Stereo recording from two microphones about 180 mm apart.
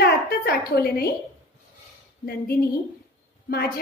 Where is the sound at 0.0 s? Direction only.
60° left (ahead or behind).